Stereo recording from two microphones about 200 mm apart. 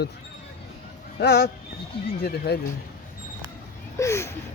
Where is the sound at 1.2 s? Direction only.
55° left (ahead or behind).